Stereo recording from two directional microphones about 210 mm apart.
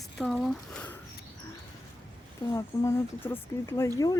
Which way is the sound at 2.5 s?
15° left (ahead or behind).